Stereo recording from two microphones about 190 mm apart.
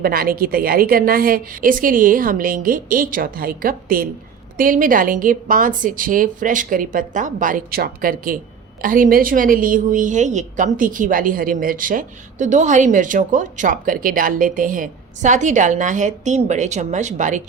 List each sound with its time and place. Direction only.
0.0 s a woman's voice: 50° right (ahead or behind)